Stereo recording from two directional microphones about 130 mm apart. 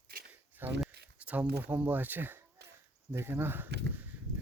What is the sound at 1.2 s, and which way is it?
Speech, 15° right (ahead or behind).